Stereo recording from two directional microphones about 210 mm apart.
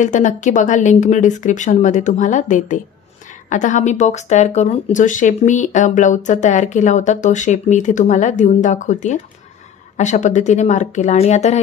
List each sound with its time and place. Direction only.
0.0 s speech: 35° left (ahead or behind)